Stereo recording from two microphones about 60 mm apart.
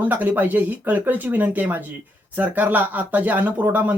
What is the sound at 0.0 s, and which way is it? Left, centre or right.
Speech, right.